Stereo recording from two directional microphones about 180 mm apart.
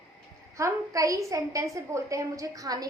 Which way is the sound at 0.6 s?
20° right (ahead or behind).